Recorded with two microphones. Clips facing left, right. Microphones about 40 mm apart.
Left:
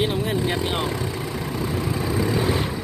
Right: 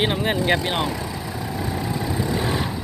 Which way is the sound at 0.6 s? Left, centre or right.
Right.